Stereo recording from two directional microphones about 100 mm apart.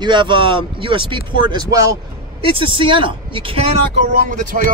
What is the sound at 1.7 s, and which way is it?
Speech, 35° right (ahead or behind).